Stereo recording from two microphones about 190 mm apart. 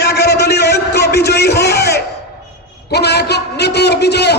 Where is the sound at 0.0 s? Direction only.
60° left (ahead or behind).